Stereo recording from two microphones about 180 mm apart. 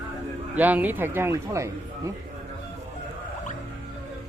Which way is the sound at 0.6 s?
10° right (ahead or behind).